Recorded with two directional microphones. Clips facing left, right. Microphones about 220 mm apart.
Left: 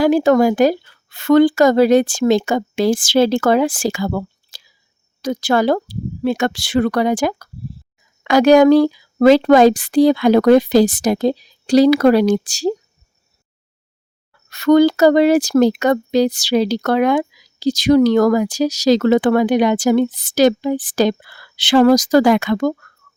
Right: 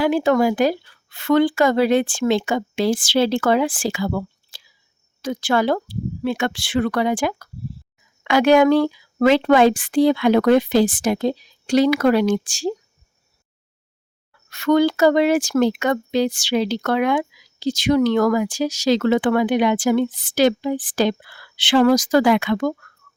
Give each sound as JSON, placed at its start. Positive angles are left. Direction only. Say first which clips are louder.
{"t": 0.0, "sound": "a woman's voice", "louder": "left 4 dB", "side_deg": 40}
{"t": 14.5, "sound": "speech", "louder": "left 5 dB", "side_deg": 40}